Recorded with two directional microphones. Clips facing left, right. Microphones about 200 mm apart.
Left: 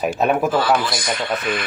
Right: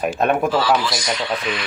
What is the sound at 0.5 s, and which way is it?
Speech, 55° left (ahead or behind).